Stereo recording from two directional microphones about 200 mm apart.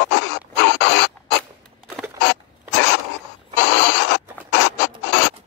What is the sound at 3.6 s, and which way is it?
Rodents, 65° left (ahead or behind).